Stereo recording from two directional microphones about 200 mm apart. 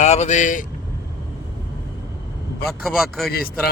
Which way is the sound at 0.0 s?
35° left (ahead or behind).